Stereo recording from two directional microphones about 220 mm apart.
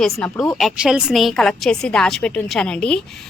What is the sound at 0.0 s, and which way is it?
A woman's voice, centre (ahead or behind).